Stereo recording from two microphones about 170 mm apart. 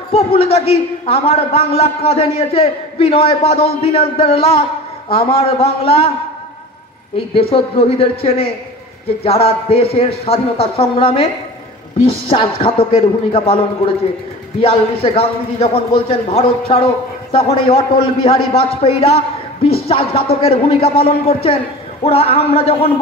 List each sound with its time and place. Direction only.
0.1 s a man's voice: 35° left (ahead or behind)
7.3 s a man's voice: 35° left (ahead or behind)